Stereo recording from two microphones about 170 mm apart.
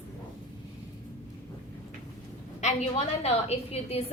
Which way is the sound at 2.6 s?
40° left (ahead or behind).